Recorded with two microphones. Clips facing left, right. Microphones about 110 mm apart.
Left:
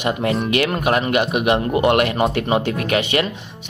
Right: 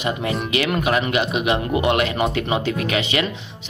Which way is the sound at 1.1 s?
55° left (ahead or behind).